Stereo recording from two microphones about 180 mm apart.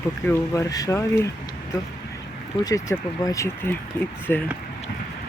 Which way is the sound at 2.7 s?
20° left (ahead or behind).